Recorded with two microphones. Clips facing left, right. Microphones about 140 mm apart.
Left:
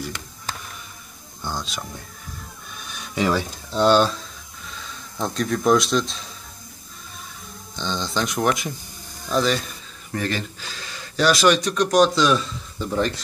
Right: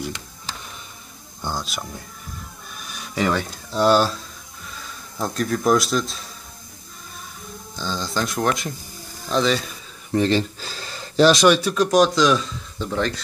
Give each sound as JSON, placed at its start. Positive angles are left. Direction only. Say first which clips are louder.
{"t": 1.4, "sound": "speech", "louder": "right 1 dB", "side_deg": -5}
{"t": 3.2, "sound": "speech", "louder": "even", "side_deg": 0}
{"t": 5.2, "sound": "speech", "louder": "even", "side_deg": 0}
{"t": 7.7, "sound": "speech", "louder": "even", "side_deg": -5}
{"t": 10.1, "sound": "speech", "louder": "right 7 dB", "side_deg": -25}
{"t": 11.4, "sound": "speech", "louder": "right 2 dB", "side_deg": -10}